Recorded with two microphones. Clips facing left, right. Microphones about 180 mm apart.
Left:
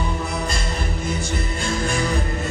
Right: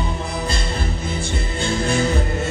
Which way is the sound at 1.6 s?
30° right (ahead or behind).